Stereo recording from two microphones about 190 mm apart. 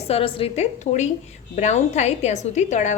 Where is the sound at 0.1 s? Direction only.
30° left (ahead or behind).